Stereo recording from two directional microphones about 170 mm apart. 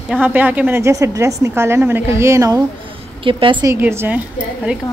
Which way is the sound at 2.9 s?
30° right (ahead or behind).